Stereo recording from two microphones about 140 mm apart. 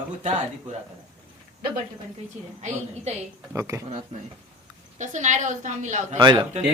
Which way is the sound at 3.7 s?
25° right (ahead or behind).